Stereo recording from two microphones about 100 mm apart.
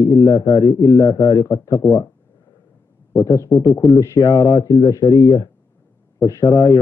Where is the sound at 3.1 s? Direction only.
35° left (ahead or behind).